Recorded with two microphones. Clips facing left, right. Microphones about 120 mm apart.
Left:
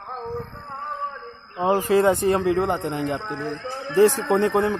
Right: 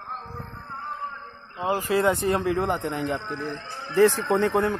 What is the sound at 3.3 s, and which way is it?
Speech, 90° left.